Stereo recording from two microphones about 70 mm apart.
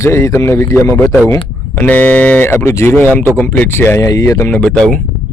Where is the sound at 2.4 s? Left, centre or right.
Left.